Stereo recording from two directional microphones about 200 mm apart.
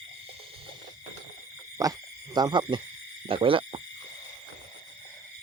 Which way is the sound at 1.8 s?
15° right (ahead or behind).